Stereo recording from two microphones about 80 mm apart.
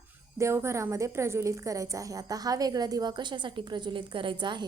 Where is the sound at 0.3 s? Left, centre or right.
Right.